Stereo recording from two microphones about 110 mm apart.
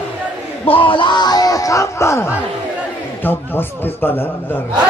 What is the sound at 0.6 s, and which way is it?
A man's voice, 50° left (ahead or behind).